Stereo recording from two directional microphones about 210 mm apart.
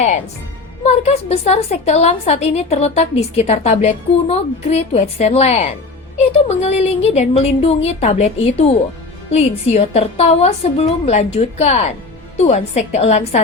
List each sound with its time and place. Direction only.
0.9 s a woman's voice: 30° left (ahead or behind)